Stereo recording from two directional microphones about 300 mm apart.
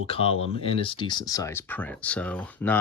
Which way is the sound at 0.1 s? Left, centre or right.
Centre.